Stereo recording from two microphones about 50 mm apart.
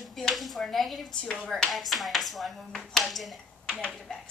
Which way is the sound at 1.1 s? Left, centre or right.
Left.